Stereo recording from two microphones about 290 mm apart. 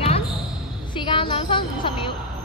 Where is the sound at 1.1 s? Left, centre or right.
Centre.